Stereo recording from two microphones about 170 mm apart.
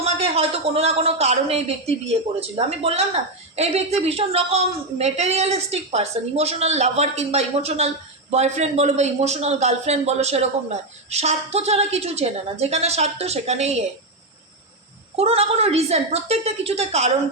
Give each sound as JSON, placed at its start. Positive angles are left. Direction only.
{"t": 0.0, "sound": "a man's voice", "side_deg": -35}
{"t": 15.1, "sound": "a man's voice", "side_deg": -35}